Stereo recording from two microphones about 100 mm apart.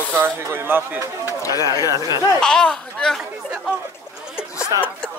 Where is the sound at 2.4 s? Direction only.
5° left (ahead or behind).